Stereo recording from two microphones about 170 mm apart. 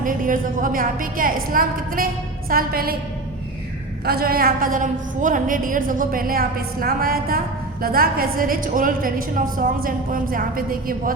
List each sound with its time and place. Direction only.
0.0 s a woman's voice: 50° right (ahead or behind)
4.0 s a woman's voice: 65° right (ahead or behind)